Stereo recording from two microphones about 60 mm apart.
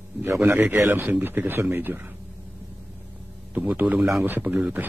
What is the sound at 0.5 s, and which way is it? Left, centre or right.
A man's voice, right.